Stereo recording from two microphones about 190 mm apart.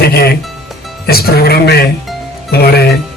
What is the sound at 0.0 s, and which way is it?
Music, 55° left (ahead or behind).